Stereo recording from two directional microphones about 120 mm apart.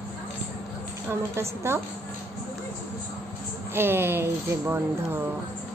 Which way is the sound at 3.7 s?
20° right (ahead or behind).